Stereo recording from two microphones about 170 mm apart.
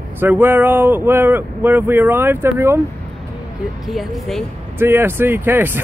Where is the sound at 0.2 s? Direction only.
10° right (ahead or behind).